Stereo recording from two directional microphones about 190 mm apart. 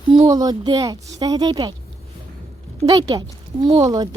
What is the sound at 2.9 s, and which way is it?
Speech, 20° right (ahead or behind).